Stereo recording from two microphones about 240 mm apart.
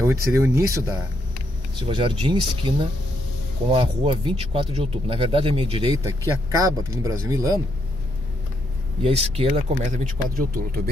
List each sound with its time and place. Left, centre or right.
0.0 s speech: centre
9.0 s speech: right